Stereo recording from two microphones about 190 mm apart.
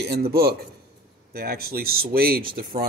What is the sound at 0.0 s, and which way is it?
Speech, 55° right (ahead or behind).